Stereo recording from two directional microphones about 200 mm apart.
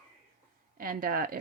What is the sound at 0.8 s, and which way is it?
Speech, 45° right (ahead or behind).